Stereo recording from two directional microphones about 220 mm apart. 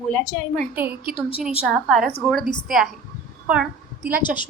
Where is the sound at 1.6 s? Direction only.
Centre (ahead or behind).